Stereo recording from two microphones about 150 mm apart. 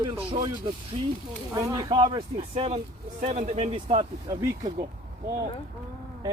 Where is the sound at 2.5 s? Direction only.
45° right (ahead or behind).